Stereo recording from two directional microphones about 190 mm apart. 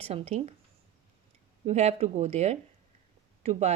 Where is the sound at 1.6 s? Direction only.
35° right (ahead or behind).